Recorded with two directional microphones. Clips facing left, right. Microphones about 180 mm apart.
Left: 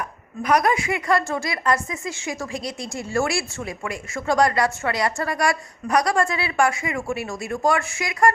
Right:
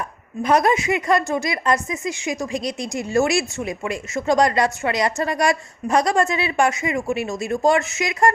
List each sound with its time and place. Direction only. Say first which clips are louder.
0.4 s speech: right 2 dB; 25° right (ahead or behind)